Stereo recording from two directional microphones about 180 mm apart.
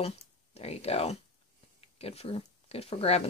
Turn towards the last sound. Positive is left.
turn(degrees=35)  # may be behind; listen again after turning